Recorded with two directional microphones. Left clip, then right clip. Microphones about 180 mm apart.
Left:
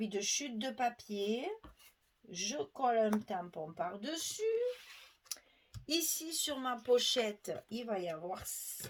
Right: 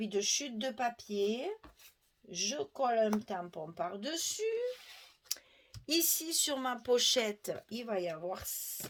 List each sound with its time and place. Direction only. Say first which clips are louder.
0.0 s speech: right 3 dB; 40° right (ahead or behind)
5.3 s clicking: right 6 dB; 45° right (ahead or behind)
5.8 s speech: right 3 dB; 45° right (ahead or behind)